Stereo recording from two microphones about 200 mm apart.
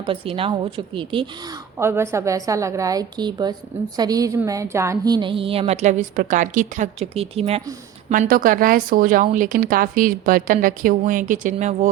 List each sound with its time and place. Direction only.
0.0 s a woman's voice: 25° right (ahead or behind)
1.8 s a woman's voice: 10° right (ahead or behind); by 7.6 s 30° right (ahead or behind)
8.1 s speech: 45° right (ahead or behind)